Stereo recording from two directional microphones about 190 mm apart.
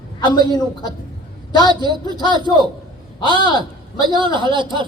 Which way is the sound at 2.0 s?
25° left (ahead or behind).